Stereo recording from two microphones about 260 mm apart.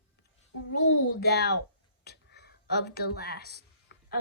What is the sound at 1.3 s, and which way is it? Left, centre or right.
Speech, left.